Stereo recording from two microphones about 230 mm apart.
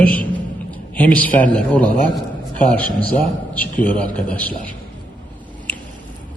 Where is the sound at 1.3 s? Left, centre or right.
Left.